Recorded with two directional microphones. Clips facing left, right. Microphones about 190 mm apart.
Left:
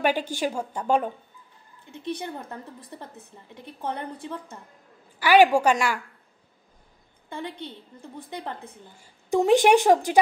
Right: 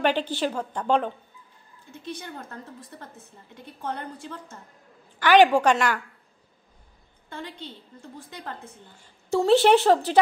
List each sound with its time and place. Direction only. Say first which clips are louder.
0.0 s a woman's voice: right 1 dB; 10° left (ahead or behind)
3.0 s a woman's voice: left 2 dB; 20° left (ahead or behind)
8.0 s a woman's voice: left 5 dB; 20° left (ahead or behind)